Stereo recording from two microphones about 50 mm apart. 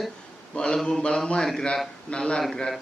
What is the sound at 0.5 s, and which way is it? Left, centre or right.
A man's voice, left.